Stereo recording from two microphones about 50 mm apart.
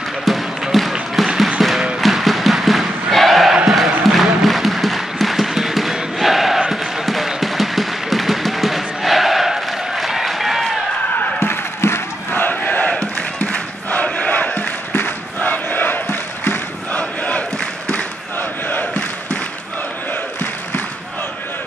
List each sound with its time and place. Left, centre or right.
0.2 s a sound: centre
1.6 s music: centre
2.0 s a sound: centre
3.7 s music: centre
11.3 s crowd: left
14.9 s crowd: left
15.5 s battle cry: left
16.9 s crowd: left
18.7 s battle cry: left